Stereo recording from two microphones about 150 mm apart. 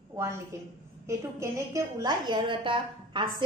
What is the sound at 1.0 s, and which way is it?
A woman's voice, 20° right (ahead or behind).